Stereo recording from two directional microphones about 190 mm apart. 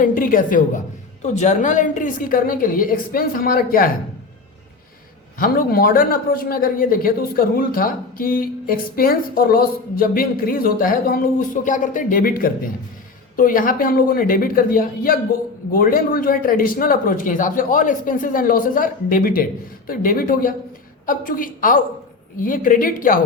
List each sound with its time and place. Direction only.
0.0 s a woman's voice: 45° left (ahead or behind)
5.4 s a man's voice: 50° left (ahead or behind)